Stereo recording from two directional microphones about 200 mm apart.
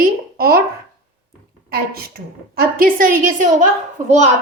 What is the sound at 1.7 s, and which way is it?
A woman's voice, 50° right (ahead or behind).